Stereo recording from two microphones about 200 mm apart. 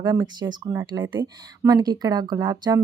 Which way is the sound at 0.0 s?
20° right (ahead or behind).